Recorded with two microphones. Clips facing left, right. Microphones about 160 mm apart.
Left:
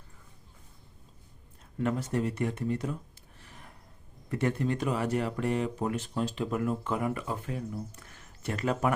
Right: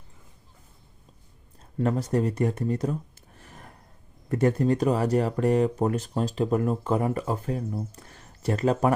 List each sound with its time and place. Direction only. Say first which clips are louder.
1.8 s speech: right 5 dB; 35° right (ahead or behind)